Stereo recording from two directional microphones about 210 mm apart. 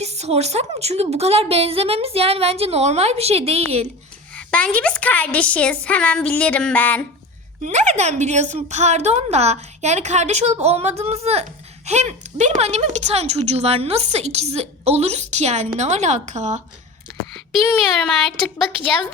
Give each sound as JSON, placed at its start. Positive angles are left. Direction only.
{"t": 0.0, "sound": "a woman's voice", "side_deg": -30}
{"t": 4.4, "sound": "a woman's voice", "side_deg": 5}
{"t": 7.6, "sound": "a woman's voice", "side_deg": -35}
{"t": 17.3, "sound": "a woman's voice", "side_deg": 0}